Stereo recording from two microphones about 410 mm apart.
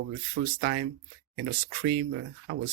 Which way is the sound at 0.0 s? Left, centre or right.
Right.